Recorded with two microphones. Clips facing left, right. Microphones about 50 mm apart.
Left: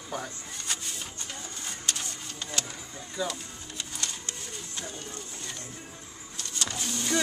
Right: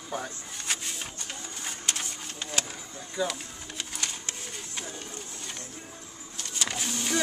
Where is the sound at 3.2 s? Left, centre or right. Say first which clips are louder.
Right 2 dB; centre.